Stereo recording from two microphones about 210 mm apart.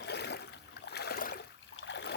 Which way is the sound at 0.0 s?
55° left (ahead or behind).